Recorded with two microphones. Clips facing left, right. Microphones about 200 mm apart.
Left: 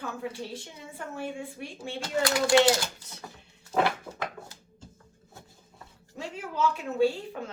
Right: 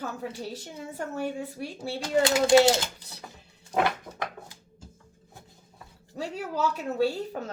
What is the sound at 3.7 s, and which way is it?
Speech, 15° right (ahead or behind).